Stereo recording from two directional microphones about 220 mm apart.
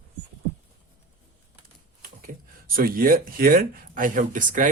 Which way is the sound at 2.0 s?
40° right (ahead or behind).